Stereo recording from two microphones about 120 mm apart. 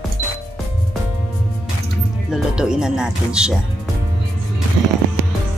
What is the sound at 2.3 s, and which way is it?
Speech, 5° right (ahead or behind).